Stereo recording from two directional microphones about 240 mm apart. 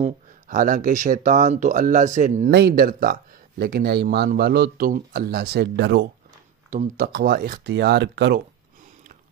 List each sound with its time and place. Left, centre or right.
0.0 s speech: right
6.7 s speech: right